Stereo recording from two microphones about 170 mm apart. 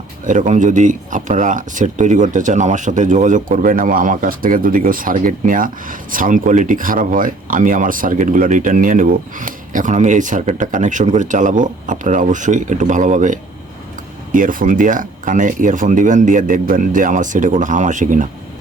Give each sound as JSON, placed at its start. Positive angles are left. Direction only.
{"t": 0.3, "sound": "speech", "side_deg": -45}